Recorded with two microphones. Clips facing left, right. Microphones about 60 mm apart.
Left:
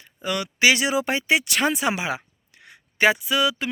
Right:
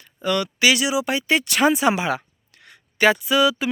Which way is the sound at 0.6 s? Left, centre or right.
Left.